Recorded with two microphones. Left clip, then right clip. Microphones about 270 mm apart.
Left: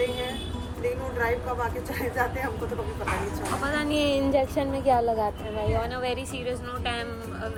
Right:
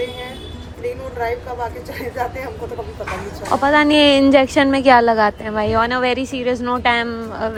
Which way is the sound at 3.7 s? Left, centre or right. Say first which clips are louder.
Right 13 dB; right.